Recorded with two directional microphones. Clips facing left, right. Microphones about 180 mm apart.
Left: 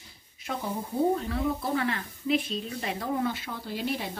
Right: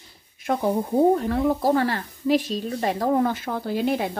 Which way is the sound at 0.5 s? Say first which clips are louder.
Right 10 dB; 60° right (ahead or behind).